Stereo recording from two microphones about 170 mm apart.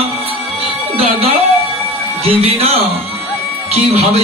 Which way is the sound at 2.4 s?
35° right (ahead or behind).